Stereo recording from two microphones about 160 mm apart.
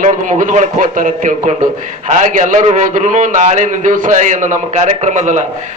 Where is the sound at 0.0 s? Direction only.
55° right (ahead or behind).